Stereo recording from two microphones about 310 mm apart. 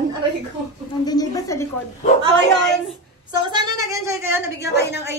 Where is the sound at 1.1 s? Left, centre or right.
Centre.